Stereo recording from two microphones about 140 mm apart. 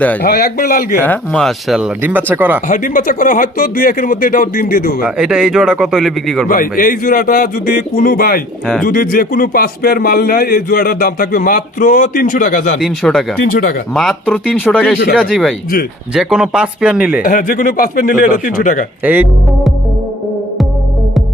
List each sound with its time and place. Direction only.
0.2 s speech: 90° left
1.0 s a man's voice: 10° left (ahead or behind)
2.0 s speech: 15° right (ahead or behind)
2.6 s speech: 70° left (ahead or behind); by 5.0 s 90° left
5.0 s a man's voice: 5° right (ahead or behind)
6.5 s speech: 90° left; by 12.8 s 70° left (ahead or behind)
12.8 s a man's voice: centre (ahead or behind)
13.4 s speech: 85° left
13.9 s a man's voice: centre (ahead or behind)
17.2 s speech: 80° left
19.0 s speech: 10° right (ahead or behind)